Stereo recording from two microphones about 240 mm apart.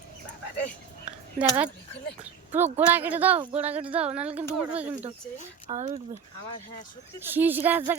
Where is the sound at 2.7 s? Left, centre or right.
Centre.